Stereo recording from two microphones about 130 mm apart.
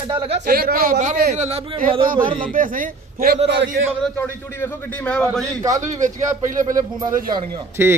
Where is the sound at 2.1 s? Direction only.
40° right (ahead or behind).